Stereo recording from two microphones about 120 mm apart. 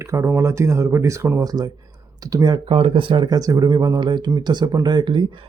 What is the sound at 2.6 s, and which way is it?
Speech, 50° right (ahead or behind).